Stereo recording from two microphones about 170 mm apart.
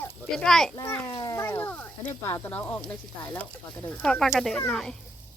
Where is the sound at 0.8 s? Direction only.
15° left (ahead or behind).